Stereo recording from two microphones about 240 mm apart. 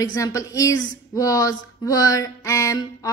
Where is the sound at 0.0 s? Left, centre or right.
Centre.